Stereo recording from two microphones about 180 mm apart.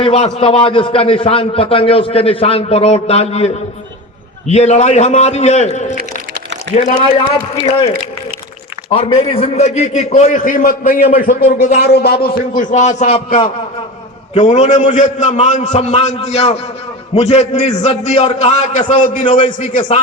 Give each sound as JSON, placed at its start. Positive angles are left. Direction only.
{"t": 0.0, "sound": "a man's voice", "side_deg": 35}
{"t": 8.9, "sound": "a man's voice", "side_deg": 30}
{"t": 11.8, "sound": "a man's voice", "side_deg": 65}
{"t": 19.7, "sound": "a man's voice", "side_deg": 30}